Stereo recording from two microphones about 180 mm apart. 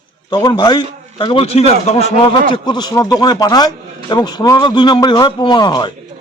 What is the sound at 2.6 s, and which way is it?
A man's voice, 25° left (ahead or behind).